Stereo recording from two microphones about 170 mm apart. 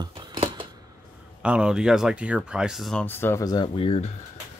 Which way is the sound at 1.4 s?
5° right (ahead or behind).